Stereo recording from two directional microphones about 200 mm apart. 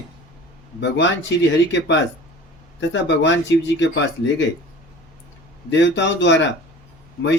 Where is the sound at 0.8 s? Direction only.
60° left (ahead or behind).